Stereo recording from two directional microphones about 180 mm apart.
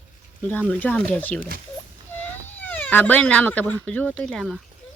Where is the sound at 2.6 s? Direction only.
10° left (ahead or behind).